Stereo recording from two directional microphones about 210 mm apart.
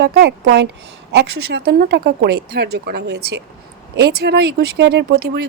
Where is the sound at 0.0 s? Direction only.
50° right (ahead or behind).